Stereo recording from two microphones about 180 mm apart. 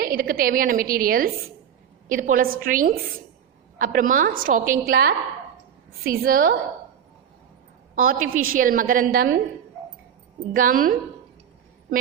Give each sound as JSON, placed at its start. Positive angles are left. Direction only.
{"t": 0.0, "sound": "a woman's voice", "side_deg": -55}
{"t": 7.9, "sound": "a woman's voice", "side_deg": -50}
{"t": 10.5, "sound": "a woman's voice", "side_deg": -50}